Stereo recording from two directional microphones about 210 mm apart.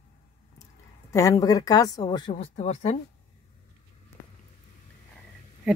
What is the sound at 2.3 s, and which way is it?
Speech, 30° left (ahead or behind).